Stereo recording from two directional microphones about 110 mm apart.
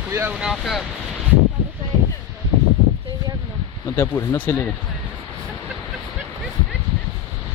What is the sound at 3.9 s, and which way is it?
Speech, 25° left (ahead or behind).